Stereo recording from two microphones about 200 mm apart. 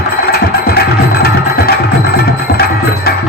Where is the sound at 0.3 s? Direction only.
50° left (ahead or behind).